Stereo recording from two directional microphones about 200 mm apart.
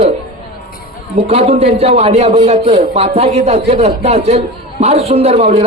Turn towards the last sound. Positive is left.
turn(degrees=-30)  # may be behind; listen again after turning